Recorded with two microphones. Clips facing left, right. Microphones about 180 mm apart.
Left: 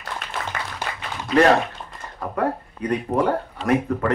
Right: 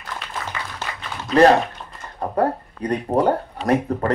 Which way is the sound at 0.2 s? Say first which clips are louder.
Left 1 dB; 50° left (ahead or behind).